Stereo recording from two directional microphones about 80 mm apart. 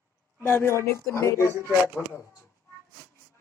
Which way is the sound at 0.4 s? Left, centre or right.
Left.